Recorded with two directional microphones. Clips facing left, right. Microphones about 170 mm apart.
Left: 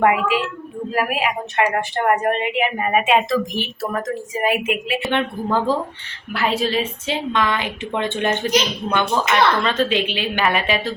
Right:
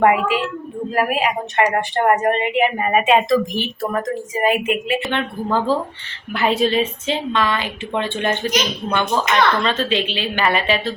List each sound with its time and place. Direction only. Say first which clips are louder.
0.0 s a woman's voice: right 2 dB; 5° left (ahead or behind)
6.3 s a woman's voice: right 3 dB; centre (ahead or behind)
7.3 s a woman's voice: even; 15° left (ahead or behind)